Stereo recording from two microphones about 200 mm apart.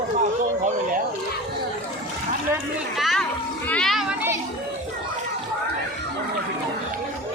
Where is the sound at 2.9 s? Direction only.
Centre (ahead or behind).